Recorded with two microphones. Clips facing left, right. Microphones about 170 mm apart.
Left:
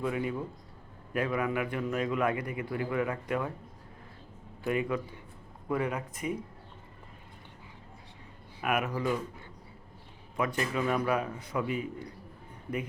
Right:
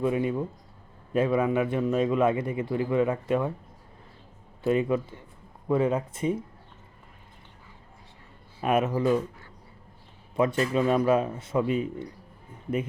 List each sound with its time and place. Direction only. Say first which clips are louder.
0.0 s a man's voice: right 6 dB; 25° right (ahead or behind)
4.6 s a man's voice: right 6 dB; 25° right (ahead or behind)
8.6 s a man's voice: right 6 dB; 25° right (ahead or behind)
10.3 s a man's voice: right 7 dB; 25° right (ahead or behind)